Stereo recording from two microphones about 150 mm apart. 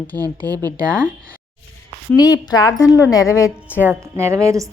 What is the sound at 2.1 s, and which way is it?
A woman's voice, 25° left (ahead or behind).